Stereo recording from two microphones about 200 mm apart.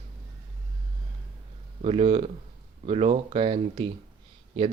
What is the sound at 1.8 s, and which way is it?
Speech, 30° right (ahead or behind).